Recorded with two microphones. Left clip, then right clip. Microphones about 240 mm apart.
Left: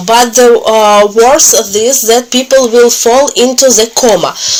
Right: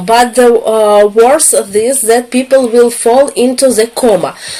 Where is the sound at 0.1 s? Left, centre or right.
Centre.